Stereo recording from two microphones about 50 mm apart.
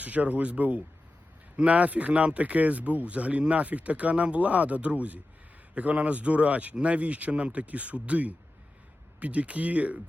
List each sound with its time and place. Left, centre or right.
0.0 s speech: right